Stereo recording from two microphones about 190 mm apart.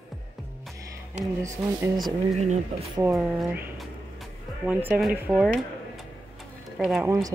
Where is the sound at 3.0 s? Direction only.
10° right (ahead or behind).